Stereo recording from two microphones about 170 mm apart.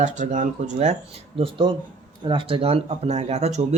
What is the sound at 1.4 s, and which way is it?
Speech, 30° right (ahead or behind).